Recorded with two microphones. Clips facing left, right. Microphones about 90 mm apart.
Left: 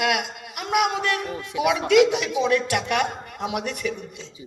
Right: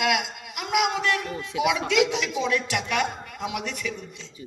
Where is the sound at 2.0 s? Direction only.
15° left (ahead or behind).